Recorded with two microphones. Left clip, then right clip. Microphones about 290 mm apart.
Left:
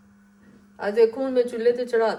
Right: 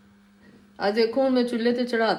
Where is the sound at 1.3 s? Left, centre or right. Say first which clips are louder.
Left 3 dB; right.